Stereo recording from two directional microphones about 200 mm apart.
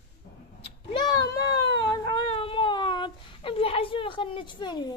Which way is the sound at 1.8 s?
20° left (ahead or behind).